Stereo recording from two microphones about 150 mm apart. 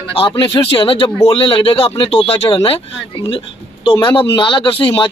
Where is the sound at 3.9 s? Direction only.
35° left (ahead or behind).